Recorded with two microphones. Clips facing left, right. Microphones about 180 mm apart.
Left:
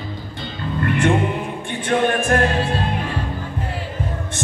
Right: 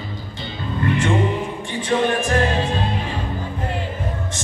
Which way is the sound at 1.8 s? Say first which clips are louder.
Left 1 dB; 55° left (ahead or behind).